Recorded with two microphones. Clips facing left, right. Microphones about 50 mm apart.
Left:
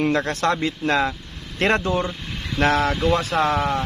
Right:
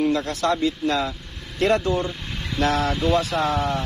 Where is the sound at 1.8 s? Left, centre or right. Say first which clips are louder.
Left 1 dB; left.